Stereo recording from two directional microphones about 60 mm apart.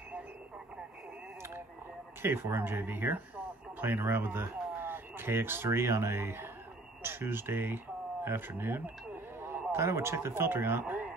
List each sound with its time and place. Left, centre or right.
2.2 s speech: right